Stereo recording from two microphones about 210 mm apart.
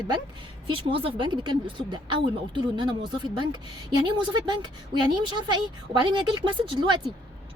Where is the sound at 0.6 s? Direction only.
25° right (ahead or behind).